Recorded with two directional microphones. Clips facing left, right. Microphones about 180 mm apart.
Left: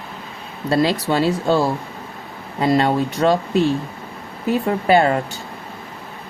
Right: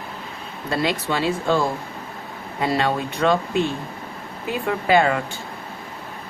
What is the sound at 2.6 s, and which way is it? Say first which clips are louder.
Speech: left 5 dB; 40° left (ahead or behind).